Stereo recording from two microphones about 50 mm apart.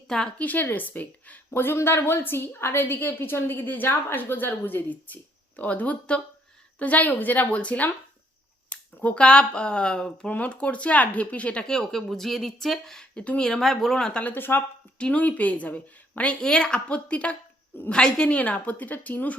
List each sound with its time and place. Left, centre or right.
0.1 s speech: centre
0.3 s a woman's voice: left
1.5 s a woman's voice: left
8.7 s a sound: left
9.2 s a woman's voice: centre
11.6 s speech: centre
13.1 s a woman's voice: left
13.4 s speech: centre
14.3 s a woman's voice: left
14.9 s a woman's voice: left
16.4 s a woman's voice: centre; by 19.4 s left